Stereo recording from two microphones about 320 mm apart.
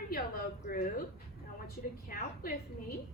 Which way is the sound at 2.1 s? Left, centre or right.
Left.